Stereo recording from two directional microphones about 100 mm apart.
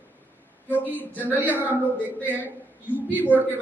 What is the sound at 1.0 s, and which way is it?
Speech, 15° left (ahead or behind).